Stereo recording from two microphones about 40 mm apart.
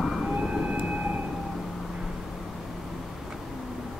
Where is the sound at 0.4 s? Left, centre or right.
Right.